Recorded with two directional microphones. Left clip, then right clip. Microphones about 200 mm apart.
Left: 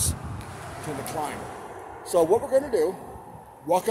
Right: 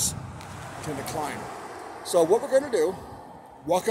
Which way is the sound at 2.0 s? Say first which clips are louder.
Even; centre (ahead or behind).